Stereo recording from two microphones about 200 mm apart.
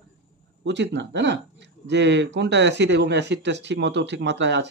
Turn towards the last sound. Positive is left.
turn(degrees=-60)  # may be behind; listen again after turning